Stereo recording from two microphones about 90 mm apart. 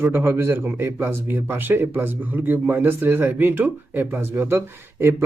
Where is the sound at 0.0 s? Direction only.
25° right (ahead or behind).